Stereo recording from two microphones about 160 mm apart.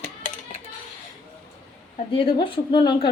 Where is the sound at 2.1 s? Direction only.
30° left (ahead or behind).